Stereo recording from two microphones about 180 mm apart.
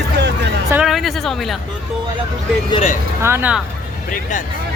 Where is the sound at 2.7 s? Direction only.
35° left (ahead or behind).